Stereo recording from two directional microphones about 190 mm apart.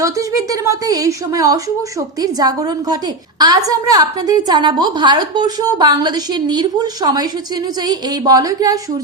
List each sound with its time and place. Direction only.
0.0 s a woman's voice: 15° right (ahead or behind)